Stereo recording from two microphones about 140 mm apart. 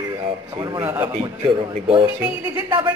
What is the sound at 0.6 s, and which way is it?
Speech, 30° right (ahead or behind).